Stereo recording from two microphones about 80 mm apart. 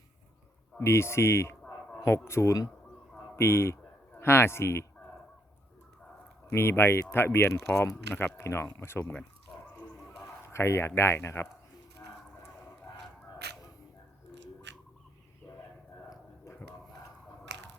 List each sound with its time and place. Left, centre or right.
0.8 s speech: left
6.5 s speech: left
9.5 s a sound: centre
10.5 s speech: left